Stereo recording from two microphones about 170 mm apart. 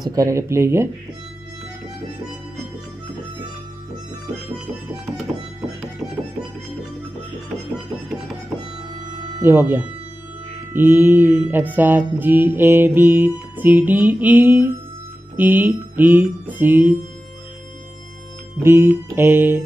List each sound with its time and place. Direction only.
0.0 s music: 20° right (ahead or behind)
9.4 s music: 15° right (ahead or behind)
18.6 s music: 15° right (ahead or behind)